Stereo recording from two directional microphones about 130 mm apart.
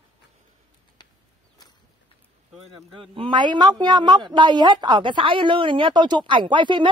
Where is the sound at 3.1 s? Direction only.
40° right (ahead or behind).